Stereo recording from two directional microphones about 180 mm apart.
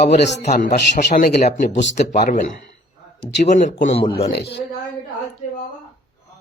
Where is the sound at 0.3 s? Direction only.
40° left (ahead or behind).